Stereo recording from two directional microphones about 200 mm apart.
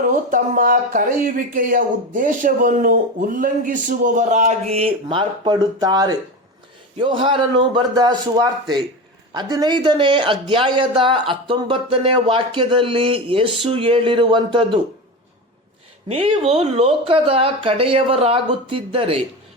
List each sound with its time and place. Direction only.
0.3 s a sound: 45° right (ahead or behind)
1.5 s speech: 45° right (ahead or behind); by 14.8 s 25° right (ahead or behind)
16.0 s speech: 30° right (ahead or behind)